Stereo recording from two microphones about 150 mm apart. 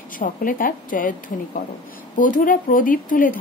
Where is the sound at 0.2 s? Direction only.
65° left (ahead or behind).